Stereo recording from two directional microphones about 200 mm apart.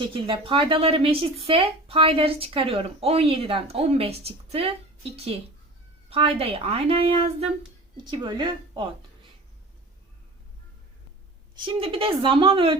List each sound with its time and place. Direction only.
0.0 s a woman's voice: 25° right (ahead or behind)
11.6 s a woman's voice: 25° right (ahead or behind)